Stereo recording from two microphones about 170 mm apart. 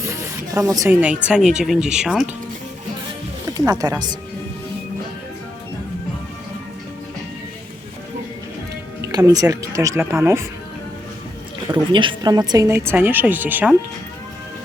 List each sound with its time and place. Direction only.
0.0 s snake: 15° right (ahead or behind)
1.3 s speech: 5° right (ahead or behind)
3.7 s speech: 20° right (ahead or behind)
9.1 s speech: 20° right (ahead or behind)
11.7 s a woman's voice: 30° right (ahead or behind); by 13.7 s 10° right (ahead or behind)